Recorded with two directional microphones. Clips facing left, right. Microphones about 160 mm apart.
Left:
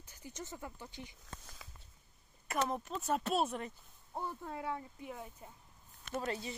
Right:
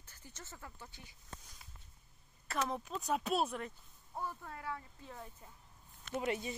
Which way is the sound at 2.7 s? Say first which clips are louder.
Left 1 dB; centre (ahead or behind).